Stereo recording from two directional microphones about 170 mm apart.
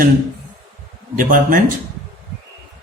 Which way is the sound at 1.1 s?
55° right (ahead or behind).